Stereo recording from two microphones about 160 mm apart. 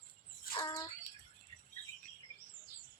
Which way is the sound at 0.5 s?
25° left (ahead or behind).